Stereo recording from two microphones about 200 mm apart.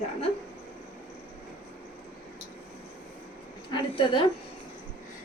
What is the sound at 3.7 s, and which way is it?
Speech, 25° left (ahead or behind).